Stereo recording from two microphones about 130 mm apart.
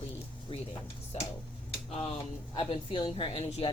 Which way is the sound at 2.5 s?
40° left (ahead or behind).